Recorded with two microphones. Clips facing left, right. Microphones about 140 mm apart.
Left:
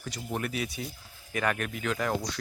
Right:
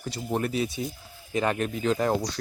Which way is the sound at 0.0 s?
30° right (ahead or behind).